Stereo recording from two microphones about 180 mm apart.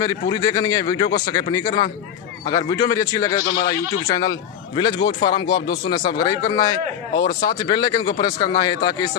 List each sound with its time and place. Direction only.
0.0 s speech: 20° left (ahead or behind)
4.9 s speech: 60° left (ahead or behind)
5.3 s speech: 25° left (ahead or behind)